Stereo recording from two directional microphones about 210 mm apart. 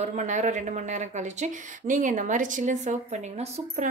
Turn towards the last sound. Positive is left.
turn(degrees=-35)  # may be behind; listen again after turning